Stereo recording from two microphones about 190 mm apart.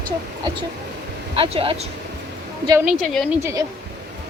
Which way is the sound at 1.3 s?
30° right (ahead or behind).